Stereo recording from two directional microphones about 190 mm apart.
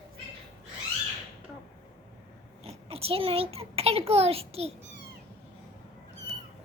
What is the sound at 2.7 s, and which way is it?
A child's voice, 30° right (ahead or behind).